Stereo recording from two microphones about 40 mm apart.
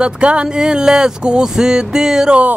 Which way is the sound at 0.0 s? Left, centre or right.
Right.